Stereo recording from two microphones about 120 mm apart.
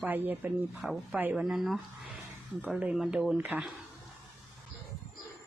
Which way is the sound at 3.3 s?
15° right (ahead or behind).